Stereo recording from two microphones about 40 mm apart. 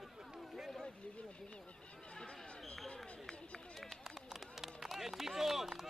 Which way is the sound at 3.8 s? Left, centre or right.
Centre.